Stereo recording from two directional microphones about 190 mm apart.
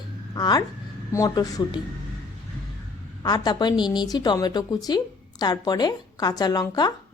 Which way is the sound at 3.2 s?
20° left (ahead or behind).